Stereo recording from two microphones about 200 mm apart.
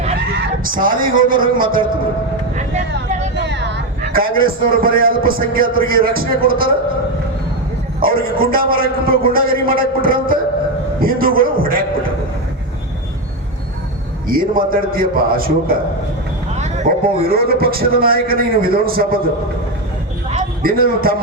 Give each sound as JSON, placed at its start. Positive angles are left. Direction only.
{"t": 0.6, "sound": "a man's voice", "side_deg": -45}
{"t": 2.6, "sound": "vehicle", "side_deg": -35}
{"t": 3.3, "sound": "a man's voice", "side_deg": -60}
{"t": 8.0, "sound": "a man's voice", "side_deg": -45}
{"t": 14.3, "sound": "a man's voice", "side_deg": -45}
{"t": 16.6, "sound": "a sound", "side_deg": -35}
{"t": 17.2, "sound": "a man's voice", "side_deg": -50}
{"t": 20.6, "sound": "a man's voice", "side_deg": -50}